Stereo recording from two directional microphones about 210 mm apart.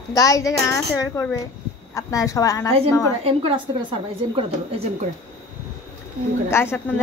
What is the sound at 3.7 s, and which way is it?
Speech, 25° right (ahead or behind).